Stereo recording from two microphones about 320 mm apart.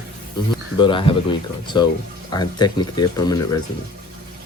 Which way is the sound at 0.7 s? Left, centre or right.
Centre.